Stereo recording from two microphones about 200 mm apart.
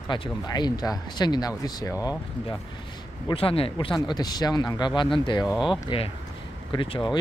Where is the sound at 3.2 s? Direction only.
30° left (ahead or behind).